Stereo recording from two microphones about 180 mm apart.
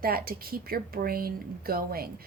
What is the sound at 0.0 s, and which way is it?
A woman's voice, 55° right (ahead or behind).